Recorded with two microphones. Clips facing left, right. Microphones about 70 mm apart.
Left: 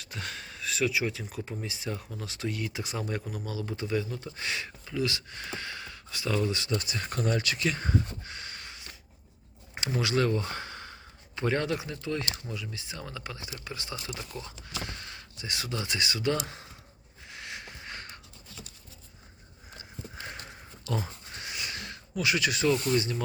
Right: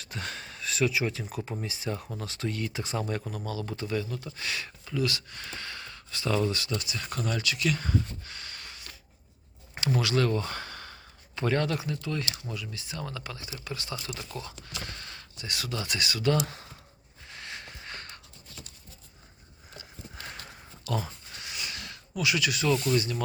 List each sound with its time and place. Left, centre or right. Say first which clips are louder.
0.0 s speech: right 1 dB; centre
6.5 s speech: left 1 dB; left
6.7 s speech: left 2 dB; left
14.1 s speech: right 1 dB; centre
17.2 s a sound: even; centre
19.7 s horse: left 2 dB; left
20.2 s a sound: left 1 dB; left